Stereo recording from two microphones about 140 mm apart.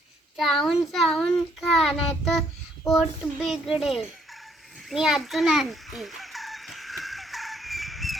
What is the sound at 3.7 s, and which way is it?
Fowl, centre (ahead or behind).